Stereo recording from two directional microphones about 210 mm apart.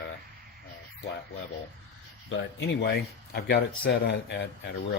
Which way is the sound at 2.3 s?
50° left (ahead or behind).